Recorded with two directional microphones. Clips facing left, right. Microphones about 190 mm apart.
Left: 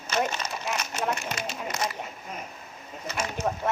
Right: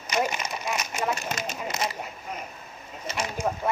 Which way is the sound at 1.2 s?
40° right (ahead or behind).